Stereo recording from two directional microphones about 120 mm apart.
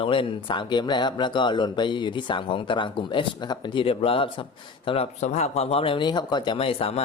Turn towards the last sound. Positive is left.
turn(degrees=55)  # may be behind; listen again after turning